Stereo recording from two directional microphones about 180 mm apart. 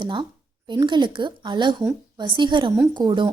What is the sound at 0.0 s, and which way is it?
A woman's voice, 25° right (ahead or behind).